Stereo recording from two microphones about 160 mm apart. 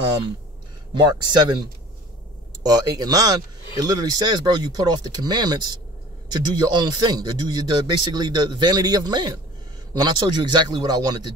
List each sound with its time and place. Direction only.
0.9 s speech: 25° right (ahead or behind)
2.6 s speech: 25° right (ahead or behind)